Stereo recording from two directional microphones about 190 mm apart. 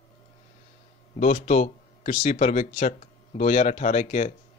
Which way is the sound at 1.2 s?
40° left (ahead or behind).